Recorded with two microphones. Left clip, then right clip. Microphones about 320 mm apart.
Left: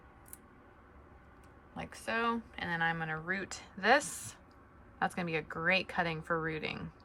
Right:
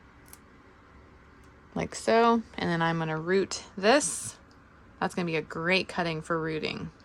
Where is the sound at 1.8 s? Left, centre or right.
Centre.